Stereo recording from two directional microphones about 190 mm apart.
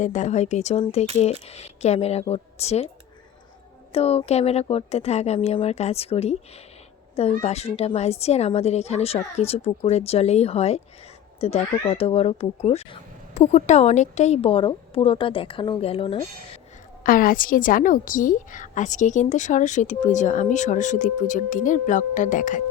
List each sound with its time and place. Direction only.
0.0 s a woman's voice: 40° left (ahead or behind)
3.9 s a woman's voice: 30° left (ahead or behind)
17.0 s a woman's voice: 50° left (ahead or behind)